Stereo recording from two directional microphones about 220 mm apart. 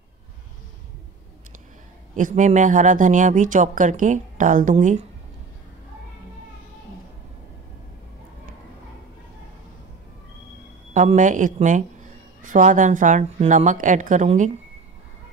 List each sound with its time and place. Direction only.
2.1 s speech: 35° right (ahead or behind)
10.9 s speech: 35° right (ahead or behind)